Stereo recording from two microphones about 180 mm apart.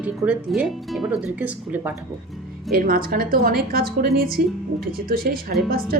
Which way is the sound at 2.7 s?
55° right (ahead or behind).